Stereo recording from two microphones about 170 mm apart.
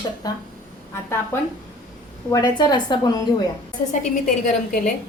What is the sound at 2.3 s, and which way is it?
Speech, 25° left (ahead or behind).